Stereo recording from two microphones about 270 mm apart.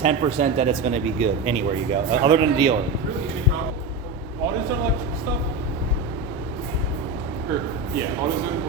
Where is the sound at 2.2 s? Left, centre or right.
Centre.